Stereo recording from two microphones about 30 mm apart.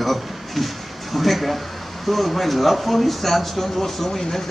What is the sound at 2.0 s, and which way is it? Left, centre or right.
Speech, centre.